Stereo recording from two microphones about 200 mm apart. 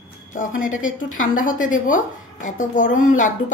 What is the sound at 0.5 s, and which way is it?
Speech, 80° left.